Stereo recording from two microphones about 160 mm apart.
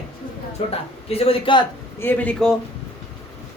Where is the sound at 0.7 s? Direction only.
40° left (ahead or behind).